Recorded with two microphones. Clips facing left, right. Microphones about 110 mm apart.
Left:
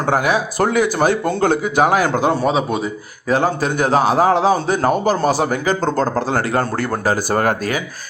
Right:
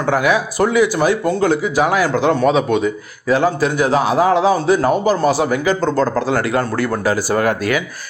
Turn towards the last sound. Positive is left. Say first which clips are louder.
# right 1 dB
turn(degrees=40)  # may be behind; listen again after turning